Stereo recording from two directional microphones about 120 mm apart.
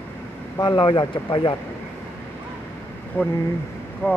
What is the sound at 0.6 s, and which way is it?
Speech, 40° left (ahead or behind).